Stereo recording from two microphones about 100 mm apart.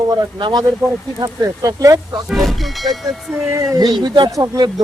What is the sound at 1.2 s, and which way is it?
Speech, 35° right (ahead or behind).